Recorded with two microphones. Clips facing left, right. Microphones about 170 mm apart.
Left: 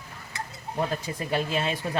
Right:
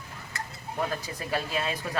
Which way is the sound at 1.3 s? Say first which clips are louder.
Left 3 dB; 25° left (ahead or behind).